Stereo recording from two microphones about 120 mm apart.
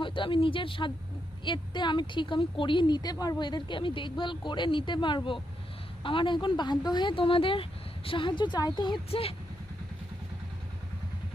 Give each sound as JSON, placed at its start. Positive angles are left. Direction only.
{"t": 0.0, "sound": "a woman's voice", "side_deg": 45}